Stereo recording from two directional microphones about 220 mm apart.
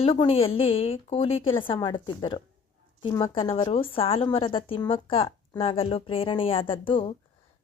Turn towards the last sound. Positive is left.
turn(degrees=25)  # may be behind; listen again after turning